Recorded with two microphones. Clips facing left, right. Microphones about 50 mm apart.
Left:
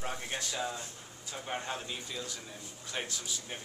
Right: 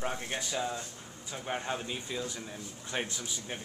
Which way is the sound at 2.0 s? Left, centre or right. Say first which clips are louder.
Right 4 dB; right.